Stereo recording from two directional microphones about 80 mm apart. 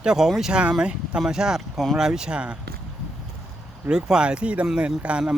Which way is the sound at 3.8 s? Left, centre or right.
Centre.